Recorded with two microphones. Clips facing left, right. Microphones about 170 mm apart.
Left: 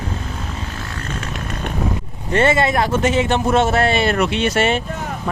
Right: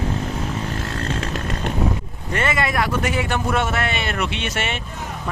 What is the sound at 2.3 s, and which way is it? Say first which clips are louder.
A man's voice: left 6 dB; 30° left (ahead or behind).